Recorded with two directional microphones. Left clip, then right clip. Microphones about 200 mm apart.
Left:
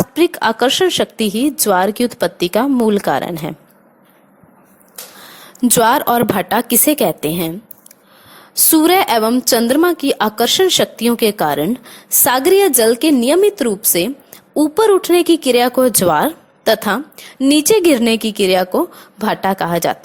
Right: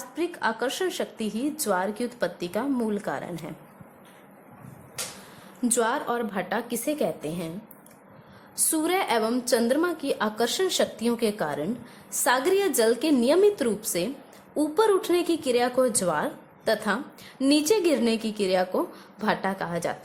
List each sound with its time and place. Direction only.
0.1 s speech: 40° left (ahead or behind)
5.6 s a woman's voice: 45° left (ahead or behind)
8.7 s speech: 45° left (ahead or behind)